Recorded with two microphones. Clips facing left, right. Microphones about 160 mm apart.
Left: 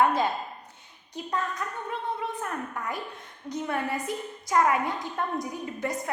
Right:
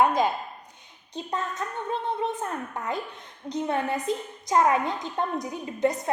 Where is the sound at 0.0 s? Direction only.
15° right (ahead or behind).